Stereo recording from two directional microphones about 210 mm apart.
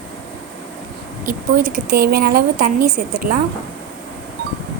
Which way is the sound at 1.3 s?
40° right (ahead or behind).